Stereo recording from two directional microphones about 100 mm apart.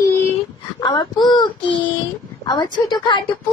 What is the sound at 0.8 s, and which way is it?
Child singing, 50° left (ahead or behind).